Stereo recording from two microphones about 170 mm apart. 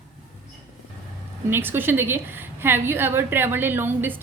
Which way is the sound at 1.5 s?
10° right (ahead or behind).